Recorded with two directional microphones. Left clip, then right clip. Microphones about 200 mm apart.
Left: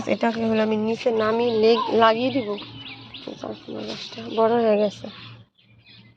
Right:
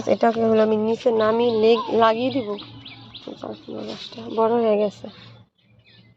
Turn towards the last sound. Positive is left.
turn(degrees=-10)  # may be behind; listen again after turning